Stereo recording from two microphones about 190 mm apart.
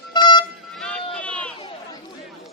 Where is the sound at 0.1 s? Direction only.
25° left (ahead or behind).